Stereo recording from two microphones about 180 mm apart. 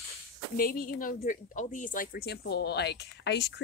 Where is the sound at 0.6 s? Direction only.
50° left (ahead or behind).